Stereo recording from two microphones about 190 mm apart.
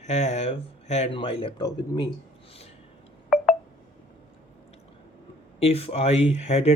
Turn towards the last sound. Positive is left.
turn(degrees=35)  # may be behind; listen again after turning